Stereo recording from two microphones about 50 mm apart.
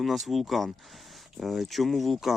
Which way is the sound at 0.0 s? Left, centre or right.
Centre.